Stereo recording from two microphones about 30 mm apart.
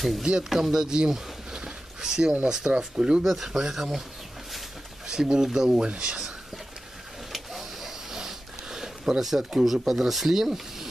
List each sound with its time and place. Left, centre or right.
0.2 s speech: right
1.1 s a sound: right
2.4 s speech: right
3.3 s speech: centre
5.0 s speech: right
5.8 s speech: right
7.3 s a sound: centre
9.4 s speech: centre
9.8 s speech: centre